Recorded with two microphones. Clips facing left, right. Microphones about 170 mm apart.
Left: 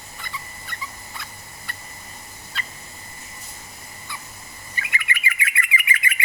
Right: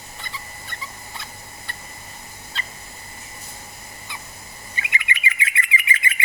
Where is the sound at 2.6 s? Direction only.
25° right (ahead or behind).